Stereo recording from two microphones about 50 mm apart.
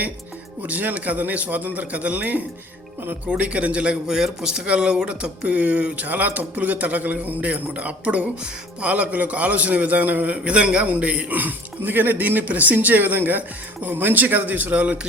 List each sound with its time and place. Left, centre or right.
0.6 s a man's voice: right
4.0 s a man's voice: centre; by 14.9 s right